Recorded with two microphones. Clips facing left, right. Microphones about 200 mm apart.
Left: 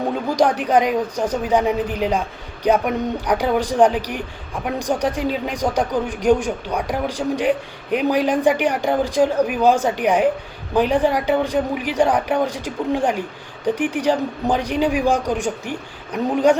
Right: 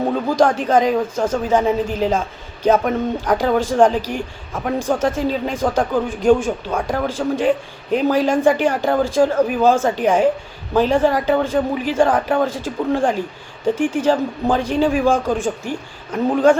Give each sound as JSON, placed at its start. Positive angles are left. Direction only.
{"t": 0.6, "sound": "speech", "side_deg": 15}